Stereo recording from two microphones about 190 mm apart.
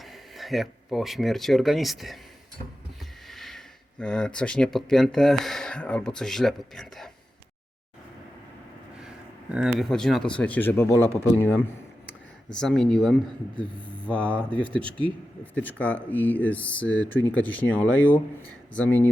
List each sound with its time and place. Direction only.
0.0 s speech: centre (ahead or behind)
3.2 s a sound: centre (ahead or behind)
4.0 s speech: 5° left (ahead or behind)
9.0 s speech: 5° right (ahead or behind)